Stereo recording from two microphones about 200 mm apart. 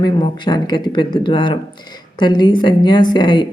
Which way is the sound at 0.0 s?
20° left (ahead or behind).